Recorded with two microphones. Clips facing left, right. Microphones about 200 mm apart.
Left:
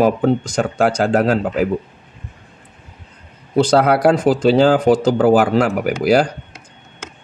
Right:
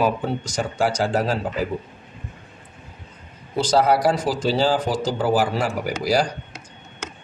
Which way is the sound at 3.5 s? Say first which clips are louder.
Left 5 dB; 60° left (ahead or behind).